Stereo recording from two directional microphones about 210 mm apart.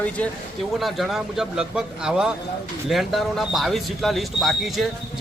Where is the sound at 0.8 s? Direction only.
Centre (ahead or behind).